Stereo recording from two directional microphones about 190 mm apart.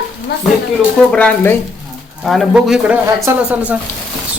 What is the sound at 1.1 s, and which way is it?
Speech, 5° left (ahead or behind).